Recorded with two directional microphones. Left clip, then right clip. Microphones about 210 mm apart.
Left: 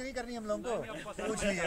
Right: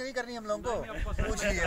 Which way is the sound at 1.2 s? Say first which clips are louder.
Right 2 dB; 20° right (ahead or behind).